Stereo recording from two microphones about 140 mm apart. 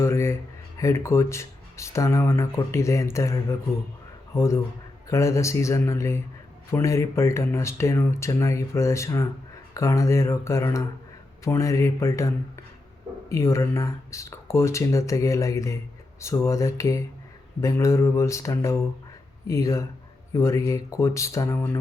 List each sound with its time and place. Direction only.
0.0 s a sound: 20° left (ahead or behind)
0.8 s speech: 20° left (ahead or behind)
4.4 s speech: 20° left (ahead or behind)